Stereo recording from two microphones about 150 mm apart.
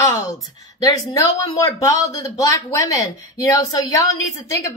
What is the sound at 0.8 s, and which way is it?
A woman's voice, 25° left (ahead or behind).